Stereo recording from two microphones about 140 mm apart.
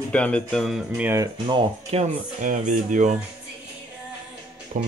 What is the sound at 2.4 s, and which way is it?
Speech, 65° right (ahead or behind).